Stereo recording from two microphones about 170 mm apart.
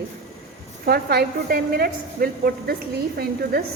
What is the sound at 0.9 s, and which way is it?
A woman's voice, 65° right (ahead or behind).